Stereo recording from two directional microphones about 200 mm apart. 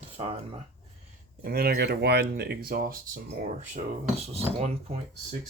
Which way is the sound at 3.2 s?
40° right (ahead or behind).